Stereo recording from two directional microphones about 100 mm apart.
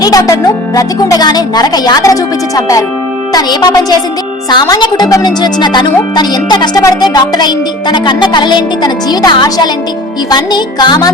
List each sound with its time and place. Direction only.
0.0 s speech: 35° left (ahead or behind)
4.4 s music: 45° left (ahead or behind)